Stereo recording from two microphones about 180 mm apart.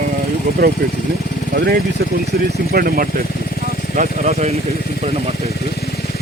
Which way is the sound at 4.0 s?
35° right (ahead or behind).